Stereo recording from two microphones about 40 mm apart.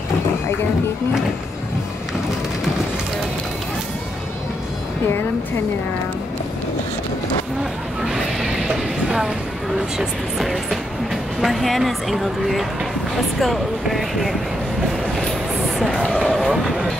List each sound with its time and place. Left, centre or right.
8.0 s vehicle: centre
9.8 s a woman's voice: centre
16.3 s a woman's voice: centre